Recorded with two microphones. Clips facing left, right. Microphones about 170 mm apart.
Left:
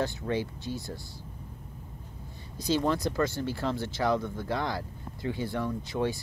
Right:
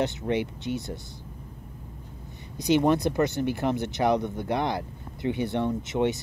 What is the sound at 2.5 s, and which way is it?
Speech, 20° right (ahead or behind).